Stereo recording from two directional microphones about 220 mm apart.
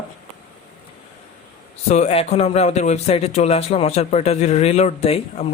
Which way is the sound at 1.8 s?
30° left (ahead or behind).